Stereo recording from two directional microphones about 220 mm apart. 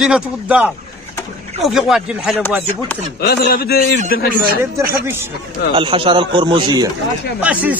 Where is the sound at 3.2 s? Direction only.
45° left (ahead or behind).